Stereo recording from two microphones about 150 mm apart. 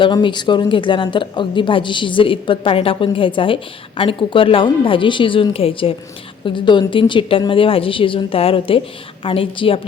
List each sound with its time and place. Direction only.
0.0 s speech: 30° left (ahead or behind)